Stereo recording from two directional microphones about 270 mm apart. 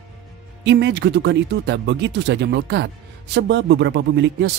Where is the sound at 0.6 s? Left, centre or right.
Right.